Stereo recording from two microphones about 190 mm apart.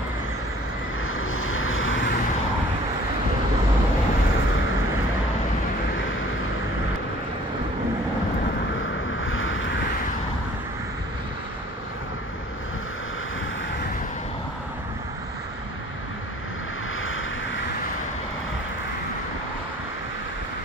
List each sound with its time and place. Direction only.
1.0 s vehicle: 90° left
9.2 s vehicle: 90° left
17.0 s vehicle: 90° left